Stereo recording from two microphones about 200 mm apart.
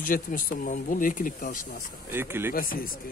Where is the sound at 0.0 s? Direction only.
45° left (ahead or behind).